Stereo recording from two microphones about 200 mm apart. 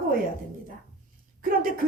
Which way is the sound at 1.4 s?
45° right (ahead or behind).